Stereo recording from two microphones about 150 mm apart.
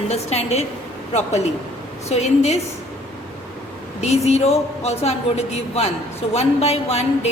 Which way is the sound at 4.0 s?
45° left (ahead or behind).